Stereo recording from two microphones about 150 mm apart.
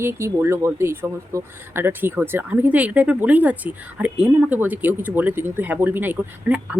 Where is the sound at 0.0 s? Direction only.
15° right (ahead or behind).